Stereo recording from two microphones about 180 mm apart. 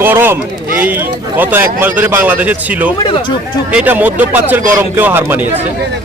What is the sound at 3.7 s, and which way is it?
Speech, 10° right (ahead or behind).